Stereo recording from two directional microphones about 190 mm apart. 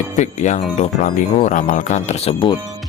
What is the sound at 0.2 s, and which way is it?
Speech, 40° left (ahead or behind).